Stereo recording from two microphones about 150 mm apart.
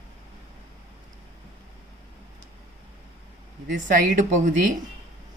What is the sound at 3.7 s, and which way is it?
Speech, 60° right (ahead or behind).